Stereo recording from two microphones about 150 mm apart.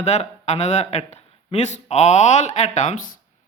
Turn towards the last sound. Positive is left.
turn(degrees=55)  # may be behind; listen again after turning